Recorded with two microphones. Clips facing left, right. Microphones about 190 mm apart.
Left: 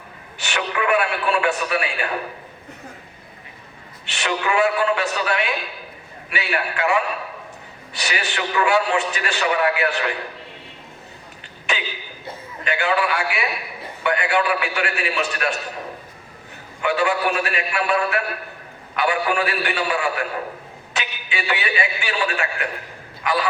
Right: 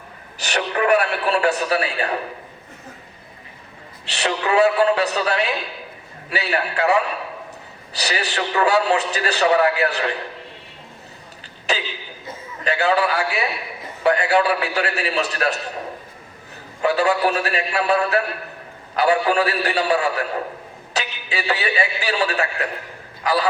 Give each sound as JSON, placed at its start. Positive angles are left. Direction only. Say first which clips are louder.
{"t": 0.3, "sound": "a man's voice", "louder": "right 2 dB", "side_deg": -40}
{"t": 4.1, "sound": "a man's voice", "louder": "right 2 dB", "side_deg": -35}
{"t": 11.7, "sound": "a sound", "louder": "right 3 dB", "side_deg": -40}
{"t": 12.6, "sound": "a man's voice", "louder": "right 2 dB", "side_deg": -35}
{"t": 16.8, "sound": "a man's voice", "louder": "right 2 dB", "side_deg": -35}